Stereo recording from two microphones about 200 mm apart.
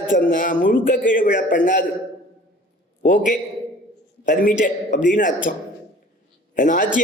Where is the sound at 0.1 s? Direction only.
40° left (ahead or behind).